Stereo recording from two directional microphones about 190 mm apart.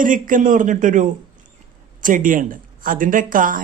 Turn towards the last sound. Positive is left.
turn(degrees=-45)  # may be behind; listen again after turning